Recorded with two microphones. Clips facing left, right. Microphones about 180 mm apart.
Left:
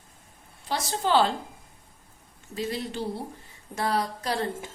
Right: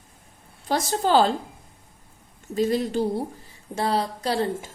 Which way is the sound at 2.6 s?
45° right (ahead or behind).